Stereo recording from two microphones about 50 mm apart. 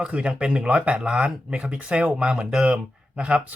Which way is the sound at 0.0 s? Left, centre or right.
Right.